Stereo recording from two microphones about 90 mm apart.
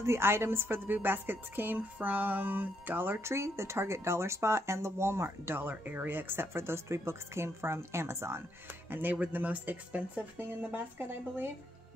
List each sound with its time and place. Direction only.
0.0 s a woman's voice: 30° right (ahead or behind)
8.9 s a woman's voice: 20° right (ahead or behind)